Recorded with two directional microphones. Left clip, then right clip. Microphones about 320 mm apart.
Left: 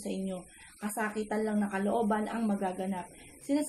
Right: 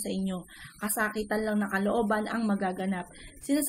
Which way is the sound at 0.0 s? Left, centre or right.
Right.